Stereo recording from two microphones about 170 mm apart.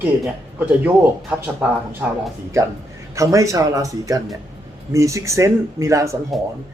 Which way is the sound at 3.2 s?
20° right (ahead or behind).